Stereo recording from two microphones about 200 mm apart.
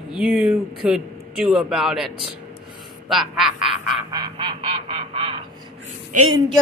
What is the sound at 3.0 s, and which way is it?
Quack, centre (ahead or behind).